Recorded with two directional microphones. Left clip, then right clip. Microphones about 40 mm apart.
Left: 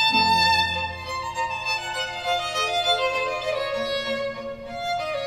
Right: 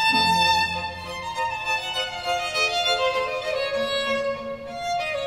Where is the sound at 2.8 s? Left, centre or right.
Right.